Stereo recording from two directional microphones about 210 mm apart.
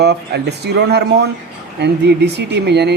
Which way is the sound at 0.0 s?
50° right (ahead or behind).